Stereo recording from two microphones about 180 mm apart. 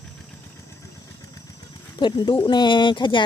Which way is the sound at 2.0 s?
25° left (ahead or behind).